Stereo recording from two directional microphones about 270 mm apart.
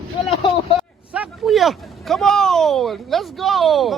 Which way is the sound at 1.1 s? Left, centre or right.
Centre.